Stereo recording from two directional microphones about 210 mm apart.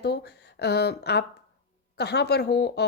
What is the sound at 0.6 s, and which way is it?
A woman's voice, 50° left (ahead or behind).